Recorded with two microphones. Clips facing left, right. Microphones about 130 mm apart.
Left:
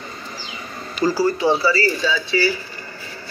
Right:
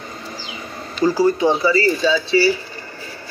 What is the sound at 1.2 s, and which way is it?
A man's voice, 20° right (ahead or behind).